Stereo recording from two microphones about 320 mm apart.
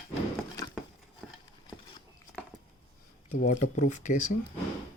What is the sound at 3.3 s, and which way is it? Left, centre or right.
Speech, left.